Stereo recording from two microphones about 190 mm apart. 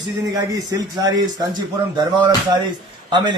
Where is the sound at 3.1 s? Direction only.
25° right (ahead or behind).